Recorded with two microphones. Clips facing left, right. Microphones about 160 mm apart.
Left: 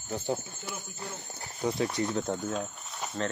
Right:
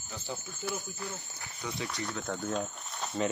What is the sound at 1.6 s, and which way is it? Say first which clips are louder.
Speech: left 8 dB; 35° left (ahead or behind).